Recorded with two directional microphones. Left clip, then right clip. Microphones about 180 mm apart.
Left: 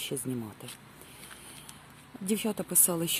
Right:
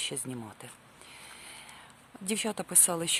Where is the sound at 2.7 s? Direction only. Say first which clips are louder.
Right 2 dB; 20° right (ahead or behind).